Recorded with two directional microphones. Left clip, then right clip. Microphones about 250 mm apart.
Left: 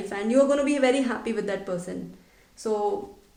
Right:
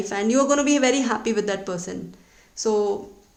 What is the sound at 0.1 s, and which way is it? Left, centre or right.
A woman's voice, right.